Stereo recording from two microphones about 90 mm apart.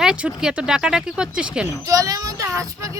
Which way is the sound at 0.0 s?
10° right (ahead or behind).